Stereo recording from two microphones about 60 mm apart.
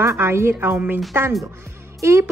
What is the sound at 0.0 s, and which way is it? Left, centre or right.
A woman's voice, right.